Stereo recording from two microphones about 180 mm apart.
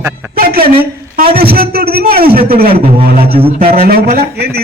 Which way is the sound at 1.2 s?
55° right (ahead or behind).